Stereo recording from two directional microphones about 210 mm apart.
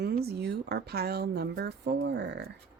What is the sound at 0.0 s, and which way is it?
Speech, 50° right (ahead or behind).